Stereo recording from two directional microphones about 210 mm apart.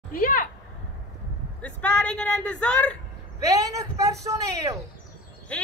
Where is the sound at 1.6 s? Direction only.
5° left (ahead or behind).